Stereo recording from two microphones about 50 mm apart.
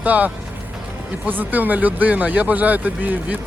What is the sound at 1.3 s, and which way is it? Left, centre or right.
Speech, right.